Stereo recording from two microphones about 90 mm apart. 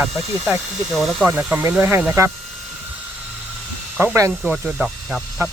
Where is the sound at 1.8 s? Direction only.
25° right (ahead or behind).